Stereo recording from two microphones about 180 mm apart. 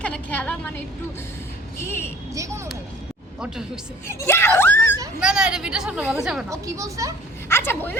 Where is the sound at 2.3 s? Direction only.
15° right (ahead or behind).